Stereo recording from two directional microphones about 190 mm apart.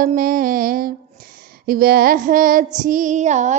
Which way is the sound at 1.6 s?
50° right (ahead or behind).